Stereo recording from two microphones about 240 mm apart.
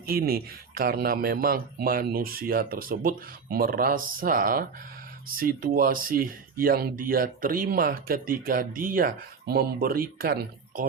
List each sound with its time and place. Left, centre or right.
0.0 s speech: right